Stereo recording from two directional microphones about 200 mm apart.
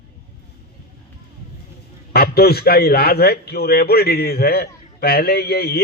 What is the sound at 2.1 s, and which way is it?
A man's voice, 50° left (ahead or behind).